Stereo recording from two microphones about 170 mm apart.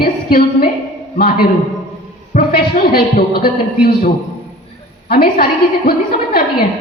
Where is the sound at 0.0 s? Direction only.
60° left (ahead or behind).